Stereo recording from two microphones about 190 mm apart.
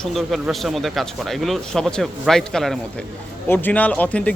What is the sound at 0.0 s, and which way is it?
Speech, centre (ahead or behind).